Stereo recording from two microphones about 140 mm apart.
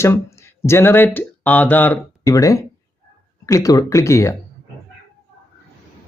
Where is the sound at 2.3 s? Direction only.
25° left (ahead or behind).